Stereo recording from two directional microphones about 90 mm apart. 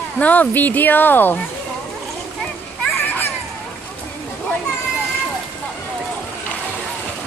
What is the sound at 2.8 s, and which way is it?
Children playing, 20° left (ahead or behind).